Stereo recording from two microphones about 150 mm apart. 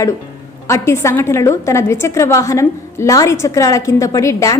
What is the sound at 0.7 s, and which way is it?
A woman's voice, 20° left (ahead or behind).